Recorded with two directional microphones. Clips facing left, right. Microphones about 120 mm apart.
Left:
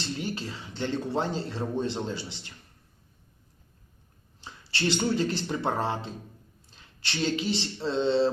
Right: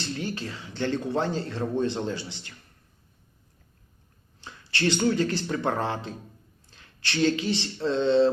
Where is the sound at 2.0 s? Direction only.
25° left (ahead or behind).